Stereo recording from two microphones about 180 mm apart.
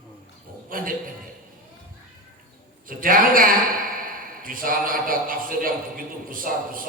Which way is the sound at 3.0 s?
50° right (ahead or behind).